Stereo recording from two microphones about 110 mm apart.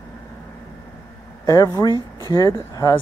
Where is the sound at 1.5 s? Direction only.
30° left (ahead or behind).